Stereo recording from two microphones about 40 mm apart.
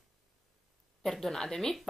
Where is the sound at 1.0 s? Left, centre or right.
Centre.